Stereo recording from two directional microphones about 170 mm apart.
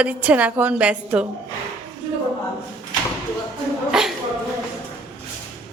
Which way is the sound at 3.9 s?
5° right (ahead or behind).